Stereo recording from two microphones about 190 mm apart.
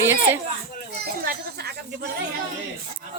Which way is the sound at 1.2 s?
55° right (ahead or behind).